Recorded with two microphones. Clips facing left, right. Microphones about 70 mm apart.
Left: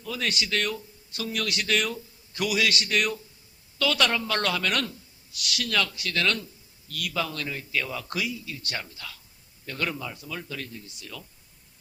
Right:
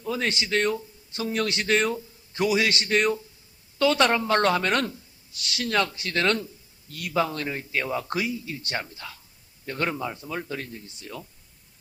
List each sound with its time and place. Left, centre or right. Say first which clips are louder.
0.0 s speech: right 3 dB; right